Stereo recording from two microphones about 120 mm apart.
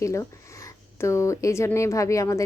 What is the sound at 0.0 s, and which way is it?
A woman's voice, 25° left (ahead or behind).